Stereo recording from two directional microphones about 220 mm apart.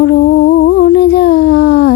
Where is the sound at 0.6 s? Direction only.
50° left (ahead or behind).